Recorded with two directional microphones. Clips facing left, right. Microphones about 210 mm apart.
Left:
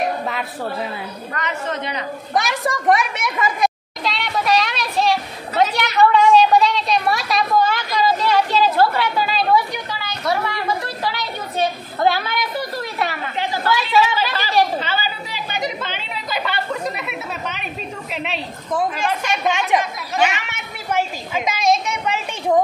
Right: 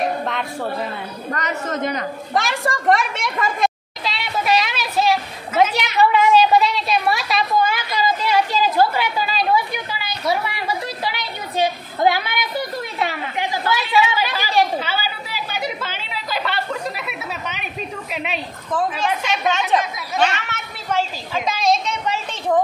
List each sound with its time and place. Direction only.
1.3 s a woman's voice: 40° right (ahead or behind)
2.3 s a sound: centre (ahead or behind)
12.0 s a woman's voice: 15° right (ahead or behind)
13.1 s chatter: 15° right (ahead or behind); by 17.6 s centre (ahead or behind)
18.1 s a woman's voice: centre (ahead or behind)
19.8 s a woman's voice: 5° left (ahead or behind)